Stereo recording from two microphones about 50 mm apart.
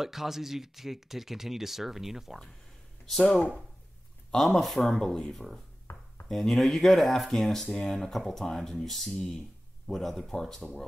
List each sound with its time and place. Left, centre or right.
0.0 s speech: centre
3.1 s speech: centre
5.9 s a sound: left
6.2 s speech: centre